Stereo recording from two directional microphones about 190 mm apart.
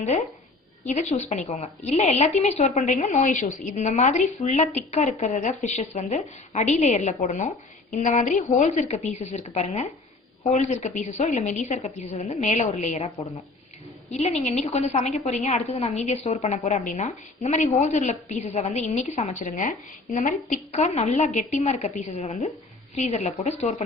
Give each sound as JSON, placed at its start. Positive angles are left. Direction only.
{"t": 0.9, "sound": "a woman's voice", "side_deg": 35}
{"t": 14.1, "sound": "a woman's voice", "side_deg": 35}